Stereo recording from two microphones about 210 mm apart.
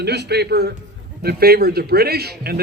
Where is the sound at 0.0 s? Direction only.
50° right (ahead or behind).